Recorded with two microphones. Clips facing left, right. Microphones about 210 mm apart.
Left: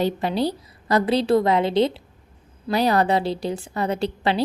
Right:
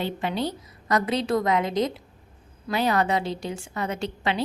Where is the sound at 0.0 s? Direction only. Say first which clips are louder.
Left 5 dB; 35° left (ahead or behind).